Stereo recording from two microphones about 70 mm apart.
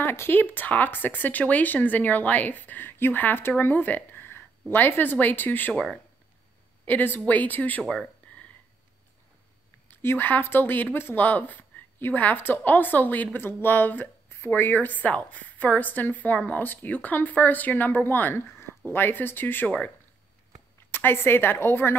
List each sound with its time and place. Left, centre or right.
0.0 s speech: left
6.9 s speech: left
8.3 s a sound: left
9.8 s speech: left
20.9 s a woman's voice: left